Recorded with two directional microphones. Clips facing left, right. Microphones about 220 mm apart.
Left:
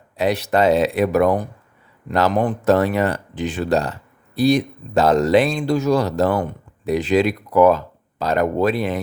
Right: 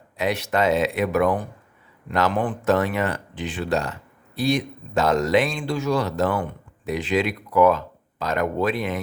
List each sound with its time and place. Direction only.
0.2 s speech: 35° left (ahead or behind)